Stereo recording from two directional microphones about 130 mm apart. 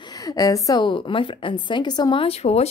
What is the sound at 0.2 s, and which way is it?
Speech, 25° left (ahead or behind).